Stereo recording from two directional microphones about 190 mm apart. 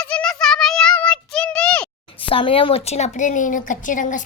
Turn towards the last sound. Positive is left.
turn(degrees=45)  # may be behind; listen again after turning